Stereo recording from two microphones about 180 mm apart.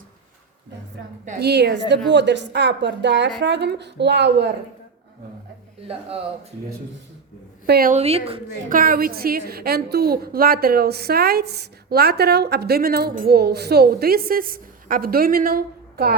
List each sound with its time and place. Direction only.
1.4 s a woman's voice: 65° right (ahead or behind)
7.7 s a woman's voice: 55° right (ahead or behind)
7.9 s a woman's voice: 35° right (ahead or behind)
8.7 s a woman's voice: 55° right (ahead or behind)